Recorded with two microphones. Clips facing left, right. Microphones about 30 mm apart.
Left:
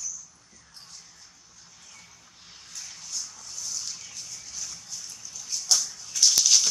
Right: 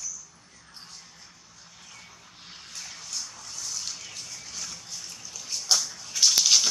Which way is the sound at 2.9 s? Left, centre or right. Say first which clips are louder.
Even; right.